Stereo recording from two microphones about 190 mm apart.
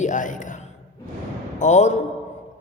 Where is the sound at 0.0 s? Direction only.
40° left (ahead or behind).